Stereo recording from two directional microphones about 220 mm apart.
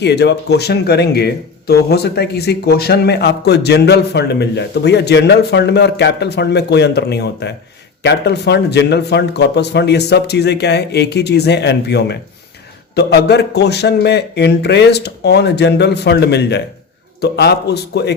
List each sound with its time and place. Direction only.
0.0 s speech: 50° left (ahead or behind)